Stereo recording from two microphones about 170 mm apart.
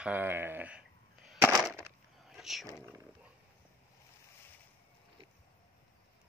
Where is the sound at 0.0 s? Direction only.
10° right (ahead or behind).